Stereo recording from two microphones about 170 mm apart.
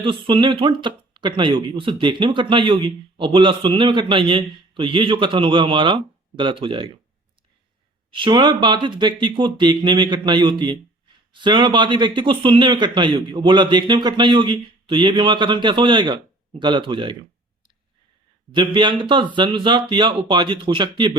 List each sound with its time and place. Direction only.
0.0 s speech: 30° right (ahead or behind)
8.1 s speech: 30° right (ahead or behind)
18.5 s speech: 30° right (ahead or behind)